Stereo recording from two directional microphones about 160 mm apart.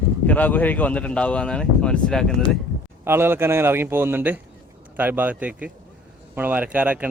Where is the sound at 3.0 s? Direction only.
15° right (ahead or behind).